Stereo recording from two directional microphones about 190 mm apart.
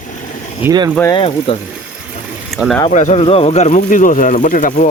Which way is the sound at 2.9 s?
35° left (ahead or behind).